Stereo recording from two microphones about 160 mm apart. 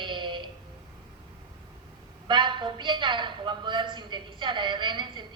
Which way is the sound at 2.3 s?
30° right (ahead or behind).